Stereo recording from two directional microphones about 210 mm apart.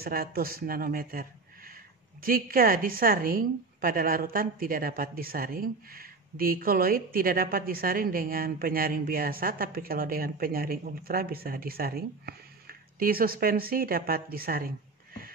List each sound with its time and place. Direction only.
0.0 s a woman's voice: 45° right (ahead or behind)